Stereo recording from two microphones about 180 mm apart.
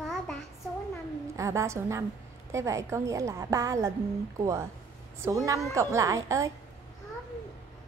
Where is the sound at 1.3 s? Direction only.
15° right (ahead or behind).